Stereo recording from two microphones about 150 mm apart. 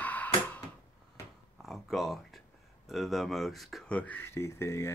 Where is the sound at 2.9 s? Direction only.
Centre (ahead or behind); by 4.9 s 15° left (ahead or behind).